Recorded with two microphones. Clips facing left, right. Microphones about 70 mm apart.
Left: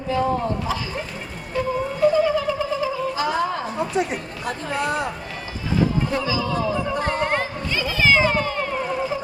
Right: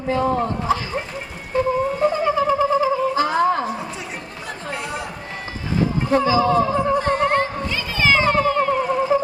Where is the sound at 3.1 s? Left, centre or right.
Right.